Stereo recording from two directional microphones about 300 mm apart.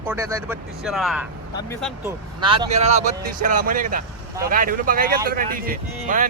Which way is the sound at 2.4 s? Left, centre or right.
Centre.